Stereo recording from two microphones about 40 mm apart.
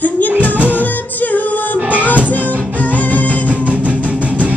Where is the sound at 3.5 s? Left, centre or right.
Right.